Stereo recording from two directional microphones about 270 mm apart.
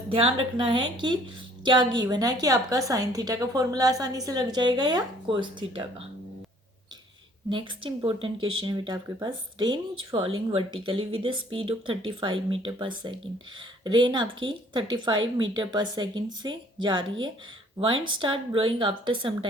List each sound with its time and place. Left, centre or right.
0.1 s a woman's voice: centre
7.5 s a woman's voice: centre